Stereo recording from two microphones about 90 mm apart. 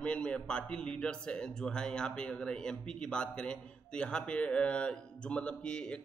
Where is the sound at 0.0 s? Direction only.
10° left (ahead or behind).